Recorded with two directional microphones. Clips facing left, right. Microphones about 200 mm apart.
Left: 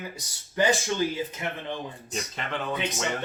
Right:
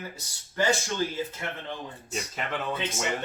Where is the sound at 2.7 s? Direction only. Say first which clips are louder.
Left 2 dB; 15° left (ahead or behind).